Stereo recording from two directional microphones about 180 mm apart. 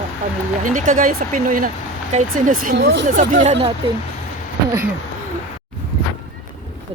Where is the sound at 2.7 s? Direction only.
75° right (ahead or behind).